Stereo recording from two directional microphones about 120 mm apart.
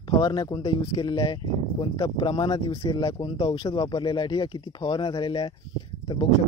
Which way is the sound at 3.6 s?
35° left (ahead or behind).